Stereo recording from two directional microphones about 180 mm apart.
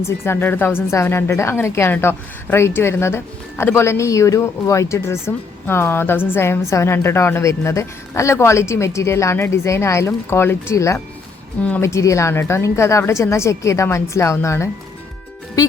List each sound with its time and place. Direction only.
0.0 s speech: 10° left (ahead or behind)